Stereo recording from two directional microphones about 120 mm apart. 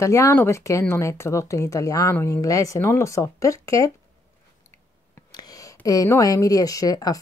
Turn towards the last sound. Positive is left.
turn(degrees=30)  # may be behind; listen again after turning